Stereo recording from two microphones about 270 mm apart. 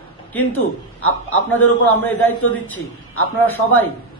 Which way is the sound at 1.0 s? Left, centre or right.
Left.